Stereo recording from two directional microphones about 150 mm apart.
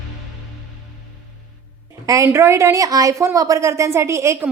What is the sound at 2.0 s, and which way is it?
Speech, 20° right (ahead or behind).